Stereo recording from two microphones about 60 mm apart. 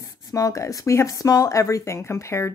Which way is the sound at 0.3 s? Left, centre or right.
Left.